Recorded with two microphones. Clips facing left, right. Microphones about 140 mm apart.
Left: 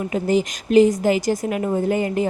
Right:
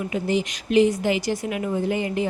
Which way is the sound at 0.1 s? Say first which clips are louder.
Left 5 dB; 40° left (ahead or behind).